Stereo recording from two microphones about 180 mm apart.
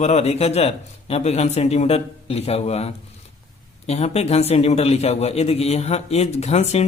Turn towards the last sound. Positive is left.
turn(degrees=35)  # may be behind; listen again after turning